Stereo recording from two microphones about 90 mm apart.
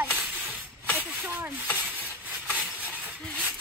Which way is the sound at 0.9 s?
25° right (ahead or behind).